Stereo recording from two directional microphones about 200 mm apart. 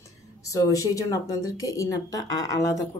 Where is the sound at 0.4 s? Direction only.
15° left (ahead or behind).